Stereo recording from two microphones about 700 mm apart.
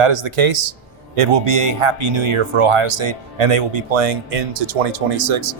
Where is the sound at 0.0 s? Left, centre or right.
Right.